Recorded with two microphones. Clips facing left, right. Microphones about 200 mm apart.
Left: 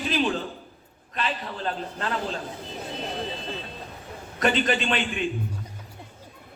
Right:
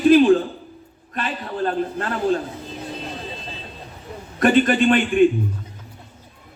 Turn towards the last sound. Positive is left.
turn(degrees=-50)  # may be behind; listen again after turning